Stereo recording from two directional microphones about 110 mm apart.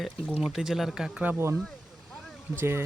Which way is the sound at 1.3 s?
25° right (ahead or behind).